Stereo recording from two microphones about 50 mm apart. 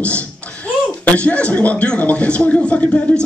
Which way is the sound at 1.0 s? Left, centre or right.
Left.